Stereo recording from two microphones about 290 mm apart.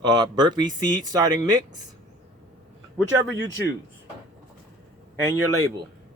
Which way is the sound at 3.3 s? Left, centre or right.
Right.